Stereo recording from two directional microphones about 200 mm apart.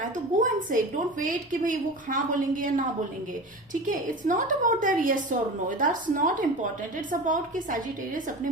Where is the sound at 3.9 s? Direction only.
40° right (ahead or behind).